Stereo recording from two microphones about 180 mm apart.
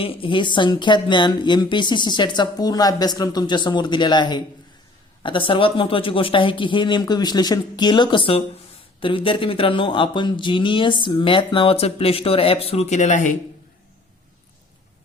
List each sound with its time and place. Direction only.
0.0 s speech: 30° left (ahead or behind)